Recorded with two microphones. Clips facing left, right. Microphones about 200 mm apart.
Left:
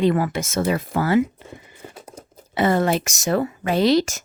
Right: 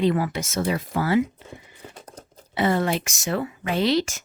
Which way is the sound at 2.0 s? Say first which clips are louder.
Left 3 dB; 10° left (ahead or behind).